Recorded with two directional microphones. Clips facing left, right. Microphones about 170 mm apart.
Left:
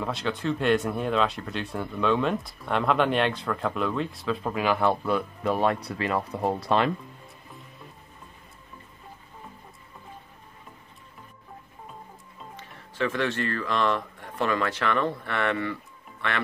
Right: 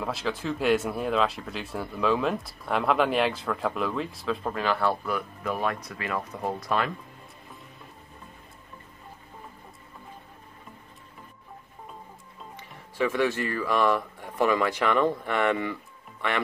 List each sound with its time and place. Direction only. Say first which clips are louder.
0.0 s speech: left 1 dB; centre (ahead or behind)
4.6 s speech: left 4 dB; 15° left (ahead or behind)
12.5 s speech: right 2 dB; 10° right (ahead or behind)